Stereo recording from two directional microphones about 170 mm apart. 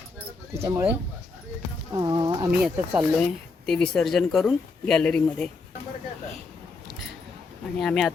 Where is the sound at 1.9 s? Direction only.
20° right (ahead or behind).